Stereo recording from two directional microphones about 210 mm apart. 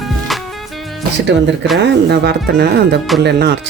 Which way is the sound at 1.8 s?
50° right (ahead or behind).